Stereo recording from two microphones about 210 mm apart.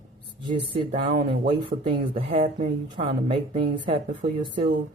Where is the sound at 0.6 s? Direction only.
25° right (ahead or behind).